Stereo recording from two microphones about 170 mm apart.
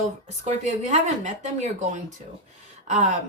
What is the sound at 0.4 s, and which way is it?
Speech, 45° right (ahead or behind).